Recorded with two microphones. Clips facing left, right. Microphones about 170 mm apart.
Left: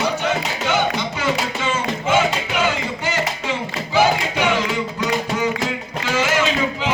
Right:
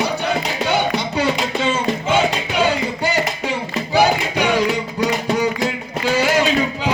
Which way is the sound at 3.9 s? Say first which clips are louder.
Right 1 dB; 40° right (ahead or behind).